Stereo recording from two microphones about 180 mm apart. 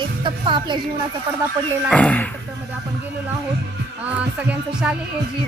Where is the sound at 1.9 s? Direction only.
5° left (ahead or behind).